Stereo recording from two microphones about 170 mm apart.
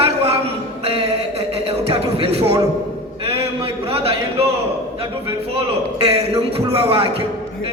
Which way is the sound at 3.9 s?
35° right (ahead or behind).